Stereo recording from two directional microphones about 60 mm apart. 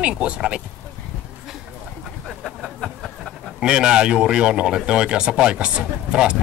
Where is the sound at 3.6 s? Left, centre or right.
Centre.